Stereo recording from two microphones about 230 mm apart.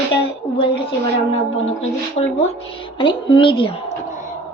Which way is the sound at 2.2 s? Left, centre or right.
Left.